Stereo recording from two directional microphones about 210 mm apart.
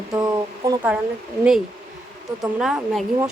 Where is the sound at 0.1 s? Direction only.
20° right (ahead or behind).